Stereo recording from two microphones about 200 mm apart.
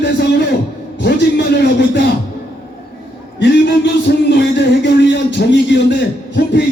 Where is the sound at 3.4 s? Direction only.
60° left (ahead or behind).